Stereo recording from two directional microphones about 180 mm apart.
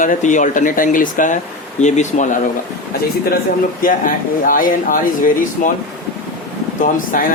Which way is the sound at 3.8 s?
50° left (ahead or behind).